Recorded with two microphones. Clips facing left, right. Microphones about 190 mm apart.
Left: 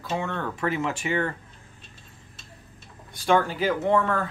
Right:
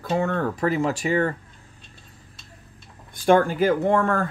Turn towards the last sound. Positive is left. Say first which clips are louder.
# right 2 dB
turn(degrees=-45)  # may be behind; listen again after turning